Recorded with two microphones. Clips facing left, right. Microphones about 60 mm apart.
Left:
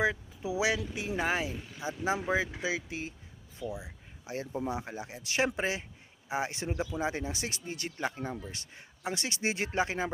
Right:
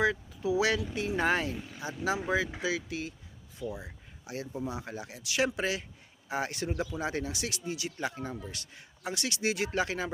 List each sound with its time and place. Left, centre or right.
0.0 s speech: left
0.9 s speech: centre
1.8 s speech: left
3.6 s speech: centre
4.3 s speech: left